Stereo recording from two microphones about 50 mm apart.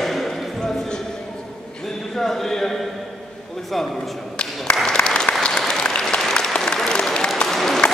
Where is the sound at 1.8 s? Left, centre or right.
Centre.